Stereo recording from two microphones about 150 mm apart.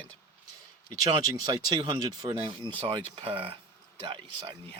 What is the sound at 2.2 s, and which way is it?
Speech, 40° right (ahead or behind).